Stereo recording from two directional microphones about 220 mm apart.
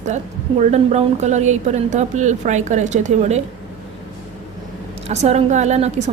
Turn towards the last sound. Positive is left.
turn(degrees=-30)  # may be behind; listen again after turning